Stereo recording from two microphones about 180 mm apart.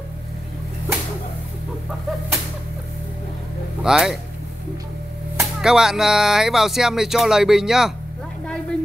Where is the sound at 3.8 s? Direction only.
5° right (ahead or behind).